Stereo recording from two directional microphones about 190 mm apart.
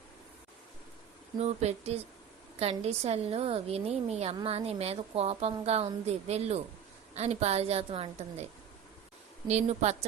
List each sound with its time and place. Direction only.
1.4 s a woman's voice: 35° right (ahead or behind)
9.5 s a woman's voice: 35° right (ahead or behind)